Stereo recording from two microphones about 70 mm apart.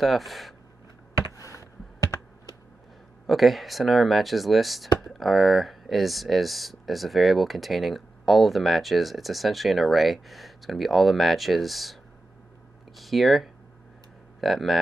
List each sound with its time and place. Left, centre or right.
0.0 s speech: centre
1.3 s a sound: left
3.3 s speech: centre